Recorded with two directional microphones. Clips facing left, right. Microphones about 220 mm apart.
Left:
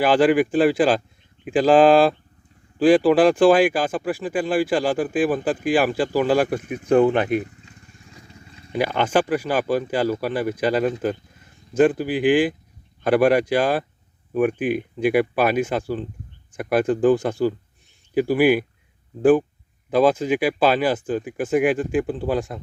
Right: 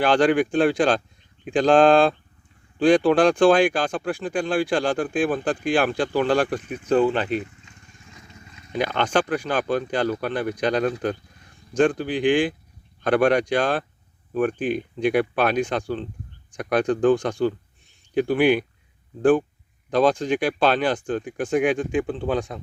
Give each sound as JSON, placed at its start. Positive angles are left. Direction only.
{"t": 0.0, "sound": "speech", "side_deg": 5}
{"t": 7.4, "sound": "vehicle", "side_deg": 35}
{"t": 8.7, "sound": "speech", "side_deg": 10}